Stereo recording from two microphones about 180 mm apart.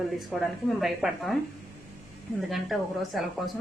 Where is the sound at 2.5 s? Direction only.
Centre (ahead or behind).